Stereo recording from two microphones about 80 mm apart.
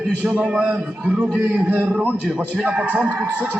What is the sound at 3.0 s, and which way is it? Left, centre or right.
Speech, centre.